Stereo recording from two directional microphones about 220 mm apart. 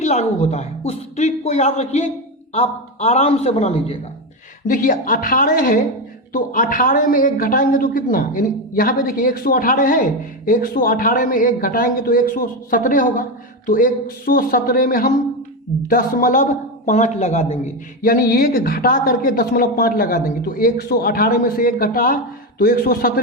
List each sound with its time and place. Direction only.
0.0 s a woman's voice: 30° left (ahead or behind)
18.0 s a man's voice: 40° left (ahead or behind)